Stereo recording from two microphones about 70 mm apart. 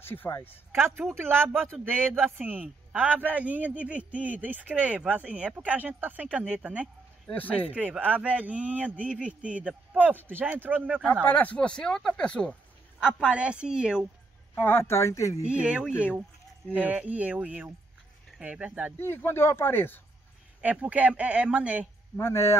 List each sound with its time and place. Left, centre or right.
0.0 s speech: left
0.7 s a man's voice: right
7.3 s speech: left
8.0 s a man's voice: right
11.2 s speech: left
13.0 s a woman's voice: centre
14.6 s speech: left
15.4 s a woman's voice: centre
18.9 s speech: left
20.6 s a man's voice: centre
22.2 s speech: left